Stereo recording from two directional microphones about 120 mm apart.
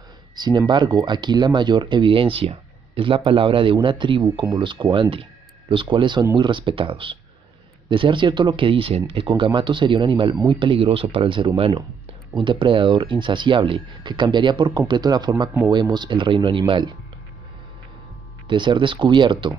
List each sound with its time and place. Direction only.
0.4 s speech: 40° right (ahead or behind)
18.5 s speech: 40° right (ahead or behind)